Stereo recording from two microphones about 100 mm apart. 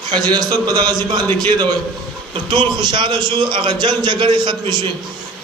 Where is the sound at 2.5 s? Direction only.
50° right (ahead or behind).